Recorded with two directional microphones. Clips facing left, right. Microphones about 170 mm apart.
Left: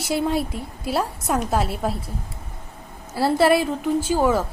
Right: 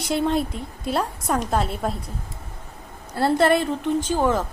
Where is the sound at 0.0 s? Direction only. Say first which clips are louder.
Even; 5° left (ahead or behind).